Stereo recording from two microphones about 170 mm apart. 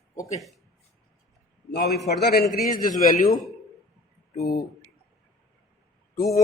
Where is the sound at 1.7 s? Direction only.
75° left (ahead or behind).